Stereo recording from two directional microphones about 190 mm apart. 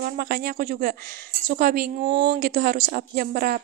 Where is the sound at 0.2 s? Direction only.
55° right (ahead or behind).